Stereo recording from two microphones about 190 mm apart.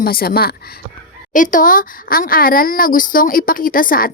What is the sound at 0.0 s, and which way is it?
A woman's voice, 50° left (ahead or behind).